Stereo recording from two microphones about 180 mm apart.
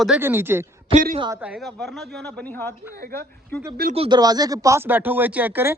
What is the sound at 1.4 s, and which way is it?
Speech, 5° right (ahead or behind).